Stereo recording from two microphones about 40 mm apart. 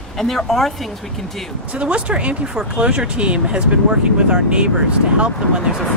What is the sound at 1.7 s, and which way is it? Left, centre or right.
Speech, right.